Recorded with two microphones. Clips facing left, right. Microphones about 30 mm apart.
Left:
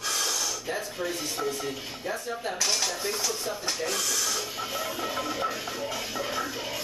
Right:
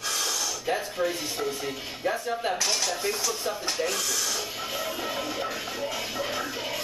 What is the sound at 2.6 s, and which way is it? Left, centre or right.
Speech, centre.